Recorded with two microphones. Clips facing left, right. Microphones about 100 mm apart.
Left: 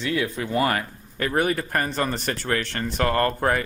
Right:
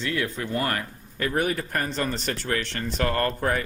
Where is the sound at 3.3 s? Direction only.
70° left (ahead or behind).